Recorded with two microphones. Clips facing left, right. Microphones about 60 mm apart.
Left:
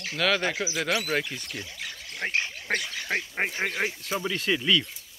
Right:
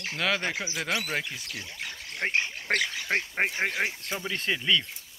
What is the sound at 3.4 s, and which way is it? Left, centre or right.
Speech, centre.